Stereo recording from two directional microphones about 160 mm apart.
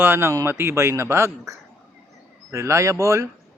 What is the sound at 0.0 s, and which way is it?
Speech, 15° right (ahead or behind).